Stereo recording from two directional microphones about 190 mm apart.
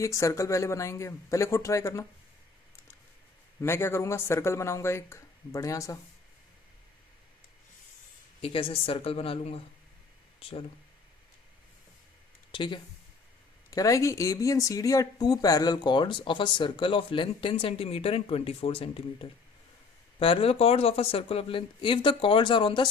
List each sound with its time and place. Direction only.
0.0 s speech: 15° left (ahead or behind)
3.6 s speech: 15° left (ahead or behind)
8.4 s speech: 30° left (ahead or behind)
12.5 s speech: 25° left (ahead or behind)